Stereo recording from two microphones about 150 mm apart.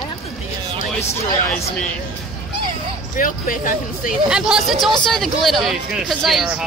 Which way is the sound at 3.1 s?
65° left (ahead or behind).